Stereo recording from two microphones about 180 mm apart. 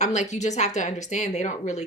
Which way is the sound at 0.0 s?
40° left (ahead or behind).